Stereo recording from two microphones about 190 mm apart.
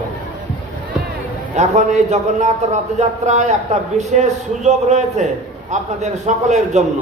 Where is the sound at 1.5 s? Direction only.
35° right (ahead or behind).